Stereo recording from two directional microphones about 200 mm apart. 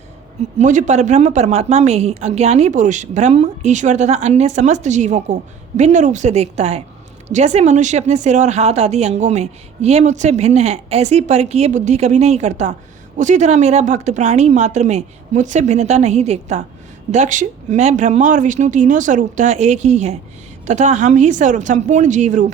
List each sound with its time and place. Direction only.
0.6 s speech: 35° right (ahead or behind)